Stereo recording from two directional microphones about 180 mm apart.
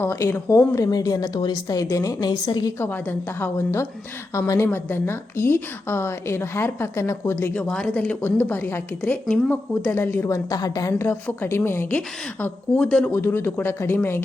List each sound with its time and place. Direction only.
0.0 s a woman's voice: 15° left (ahead or behind)